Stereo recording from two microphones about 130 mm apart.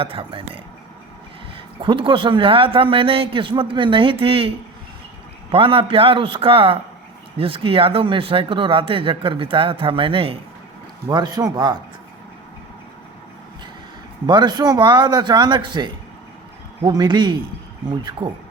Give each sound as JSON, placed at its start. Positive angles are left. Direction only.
{"t": 0.0, "sound": "speech", "side_deg": -45}
{"t": 11.1, "sound": "speech", "side_deg": -30}
{"t": 14.3, "sound": "speech", "side_deg": -35}